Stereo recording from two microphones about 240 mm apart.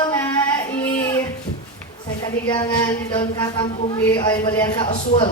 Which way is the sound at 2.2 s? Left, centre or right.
Centre.